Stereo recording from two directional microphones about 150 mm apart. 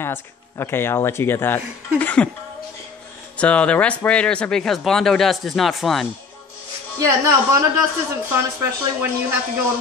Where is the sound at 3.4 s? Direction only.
10° left (ahead or behind).